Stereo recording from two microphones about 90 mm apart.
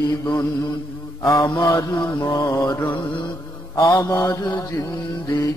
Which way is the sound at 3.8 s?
55° left (ahead or behind).